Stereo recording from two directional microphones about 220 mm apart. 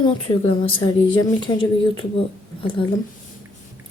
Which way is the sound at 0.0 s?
25° left (ahead or behind).